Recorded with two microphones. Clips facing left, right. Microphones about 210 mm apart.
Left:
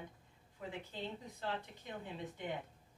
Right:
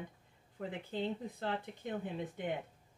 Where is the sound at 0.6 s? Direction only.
50° right (ahead or behind).